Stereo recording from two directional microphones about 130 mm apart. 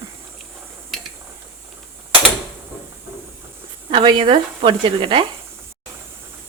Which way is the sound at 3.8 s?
40° right (ahead or behind).